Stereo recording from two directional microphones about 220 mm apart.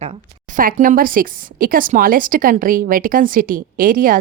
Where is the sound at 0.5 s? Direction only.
40° right (ahead or behind).